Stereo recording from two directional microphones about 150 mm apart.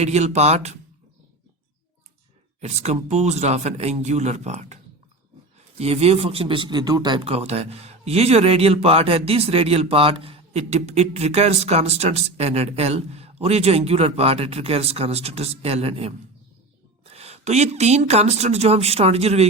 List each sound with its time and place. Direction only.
0.0 s speech: 45° right (ahead or behind)
2.6 s speech: 50° right (ahead or behind); by 7.2 s 25° right (ahead or behind)
7.2 s speech: 40° right (ahead or behind)